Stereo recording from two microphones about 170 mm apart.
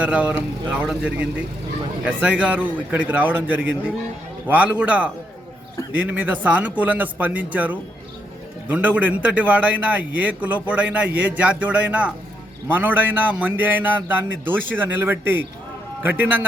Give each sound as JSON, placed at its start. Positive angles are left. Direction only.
{"t": 0.0, "sound": "a man's voice", "side_deg": -10}